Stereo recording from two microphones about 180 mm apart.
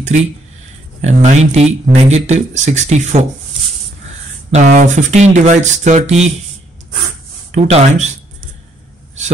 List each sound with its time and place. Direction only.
0.0 s a sound: 40° right (ahead or behind)
1.0 s speech: 40° right (ahead or behind)
4.5 s speech: 40° right (ahead or behind)
7.5 s speech: 40° right (ahead or behind)